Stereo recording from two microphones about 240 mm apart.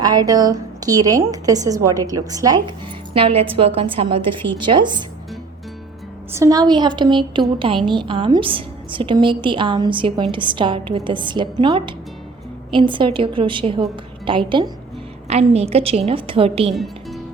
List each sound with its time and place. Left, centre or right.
0.0 s a woman's voice: centre
6.3 s a woman's voice: centre
16.7 s music: centre